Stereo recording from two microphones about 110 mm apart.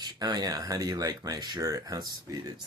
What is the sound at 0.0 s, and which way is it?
Speech, 40° right (ahead or behind).